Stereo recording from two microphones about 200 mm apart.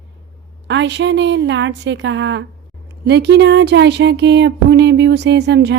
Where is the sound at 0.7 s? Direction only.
60° right (ahead or behind).